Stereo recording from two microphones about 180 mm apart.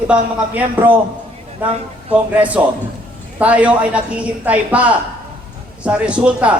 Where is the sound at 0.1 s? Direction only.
10° right (ahead or behind).